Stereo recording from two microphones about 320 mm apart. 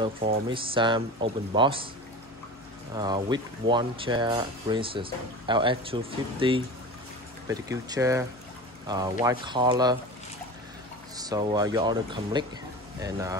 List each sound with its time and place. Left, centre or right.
0.2 s speech: centre
2.9 s speech: centre
11.1 s speech: centre